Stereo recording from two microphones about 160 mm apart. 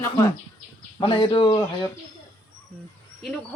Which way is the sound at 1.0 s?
35° left (ahead or behind).